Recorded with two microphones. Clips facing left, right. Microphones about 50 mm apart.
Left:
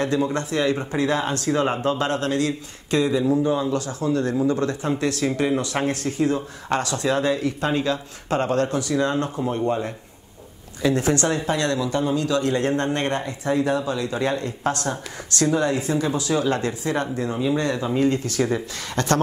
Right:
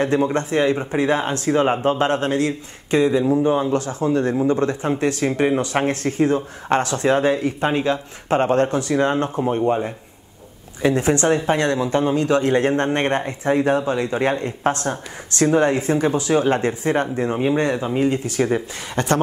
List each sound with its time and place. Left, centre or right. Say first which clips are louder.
0.0 s a man's voice: right 3 dB; right
10.8 s a man's voice: right 3 dB; right